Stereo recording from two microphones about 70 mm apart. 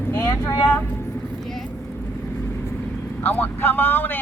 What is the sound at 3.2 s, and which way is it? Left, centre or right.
Speech, left.